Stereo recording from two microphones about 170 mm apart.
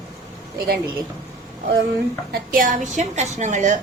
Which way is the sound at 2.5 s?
50° right (ahead or behind).